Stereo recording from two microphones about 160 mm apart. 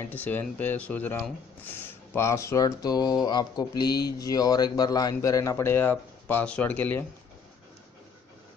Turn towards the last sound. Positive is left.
turn(degrees=10)  # may be behind; listen again after turning